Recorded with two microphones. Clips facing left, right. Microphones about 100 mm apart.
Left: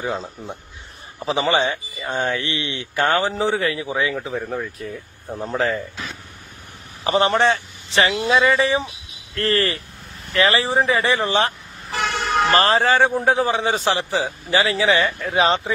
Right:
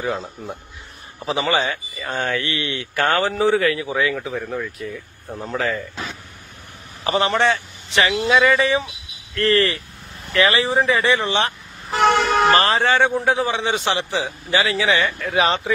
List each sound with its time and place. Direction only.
1.2 s speech: 30° left (ahead or behind)
2.0 s speech: 15° left (ahead or behind); by 5.0 s 35° left (ahead or behind)
5.3 s speech: centre (ahead or behind)
7.1 s a man's voice: 30° left (ahead or behind)
12.0 s vehicle: 90° right
12.5 s a man's voice: 30° left (ahead or behind)